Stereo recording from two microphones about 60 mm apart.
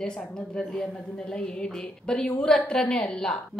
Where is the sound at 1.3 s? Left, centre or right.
Centre.